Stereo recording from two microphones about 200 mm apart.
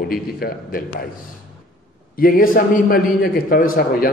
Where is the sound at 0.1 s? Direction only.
45° left (ahead or behind).